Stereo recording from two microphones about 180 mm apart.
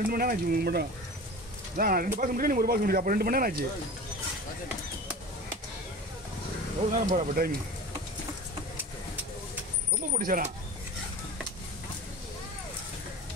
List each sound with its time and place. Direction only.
0.1 s speech: 55° right (ahead or behind)
6.9 s speech: 50° right (ahead or behind)
10.1 s speech: 50° right (ahead or behind)